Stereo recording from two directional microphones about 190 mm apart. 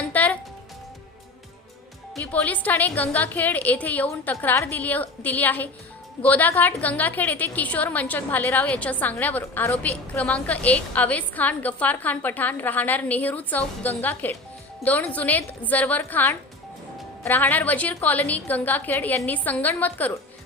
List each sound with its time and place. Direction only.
0.1 s music: 10° left (ahead or behind)
2.2 s a woman's voice: 10° left (ahead or behind)